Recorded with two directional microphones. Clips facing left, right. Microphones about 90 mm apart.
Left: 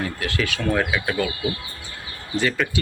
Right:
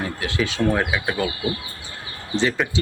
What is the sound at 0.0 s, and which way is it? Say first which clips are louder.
Speech: right 1 dB; 20° right (ahead or behind).